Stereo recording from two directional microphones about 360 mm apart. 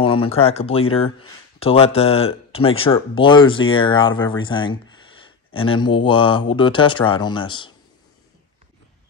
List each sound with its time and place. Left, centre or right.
0.0 s speech: centre